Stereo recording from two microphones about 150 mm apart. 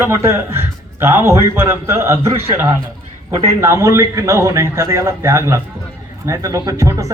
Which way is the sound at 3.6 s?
20° right (ahead or behind).